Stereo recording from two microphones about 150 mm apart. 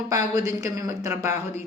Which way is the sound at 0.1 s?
20° right (ahead or behind).